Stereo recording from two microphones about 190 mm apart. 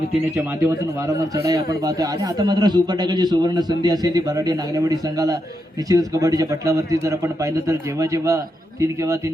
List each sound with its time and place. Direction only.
1.0 s a man's voice: 20° right (ahead or behind)